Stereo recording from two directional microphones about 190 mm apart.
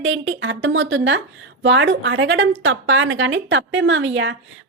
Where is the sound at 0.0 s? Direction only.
85° right.